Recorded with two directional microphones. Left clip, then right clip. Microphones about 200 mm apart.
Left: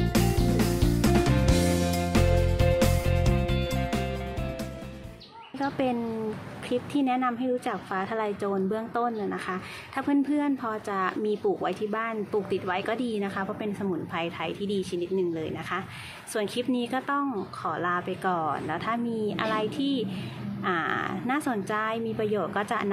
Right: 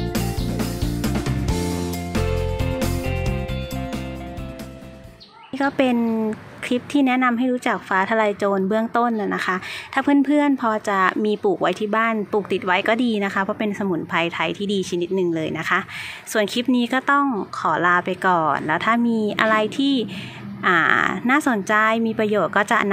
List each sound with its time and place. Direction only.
0.0 s music: centre (ahead or behind)
5.6 s speech: 50° right (ahead or behind)